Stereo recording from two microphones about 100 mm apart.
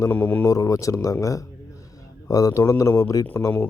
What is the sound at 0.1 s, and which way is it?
Speech, 15° left (ahead or behind).